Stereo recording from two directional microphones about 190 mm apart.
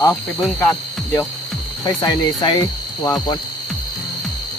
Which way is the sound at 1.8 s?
20° left (ahead or behind).